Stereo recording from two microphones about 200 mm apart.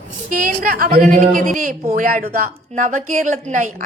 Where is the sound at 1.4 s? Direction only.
40° right (ahead or behind).